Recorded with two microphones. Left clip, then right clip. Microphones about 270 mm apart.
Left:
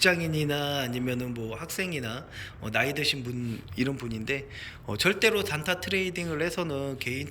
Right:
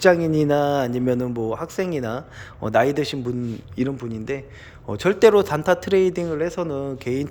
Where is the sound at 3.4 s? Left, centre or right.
Centre.